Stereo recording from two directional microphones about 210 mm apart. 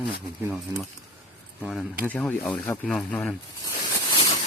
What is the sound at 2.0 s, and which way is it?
Speech, 5° left (ahead or behind).